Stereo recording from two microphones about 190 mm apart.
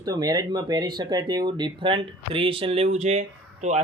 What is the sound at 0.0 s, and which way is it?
Speech, 20° right (ahead or behind).